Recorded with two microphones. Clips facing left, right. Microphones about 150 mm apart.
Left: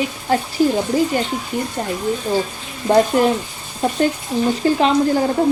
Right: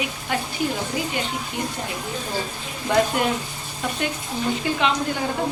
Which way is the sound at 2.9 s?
35° left (ahead or behind).